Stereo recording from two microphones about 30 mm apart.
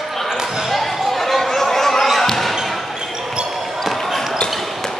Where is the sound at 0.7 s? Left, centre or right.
Centre.